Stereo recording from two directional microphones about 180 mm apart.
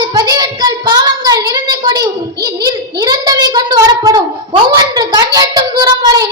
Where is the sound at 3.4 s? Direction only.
20° right (ahead or behind).